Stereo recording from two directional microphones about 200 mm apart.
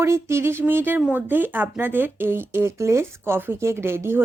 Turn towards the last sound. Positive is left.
turn(degrees=-10)  # may be behind; listen again after turning